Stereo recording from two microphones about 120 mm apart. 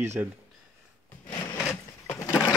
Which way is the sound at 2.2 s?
30° left (ahead or behind).